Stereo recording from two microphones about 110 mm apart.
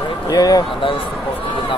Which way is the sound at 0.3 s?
35° left (ahead or behind).